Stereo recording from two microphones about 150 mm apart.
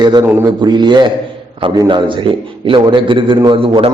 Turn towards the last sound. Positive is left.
turn(degrees=-35)  # may be behind; listen again after turning